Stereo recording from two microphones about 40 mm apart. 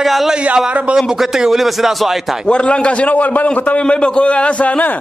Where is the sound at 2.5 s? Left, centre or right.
Left.